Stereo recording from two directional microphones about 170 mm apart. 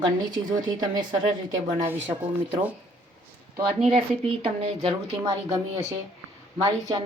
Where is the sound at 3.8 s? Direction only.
35° right (ahead or behind).